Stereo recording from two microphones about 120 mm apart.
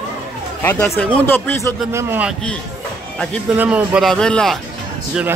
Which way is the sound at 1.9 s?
15° right (ahead or behind).